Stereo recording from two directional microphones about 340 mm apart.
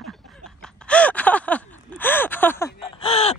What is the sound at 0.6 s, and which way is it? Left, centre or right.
Gasp, centre.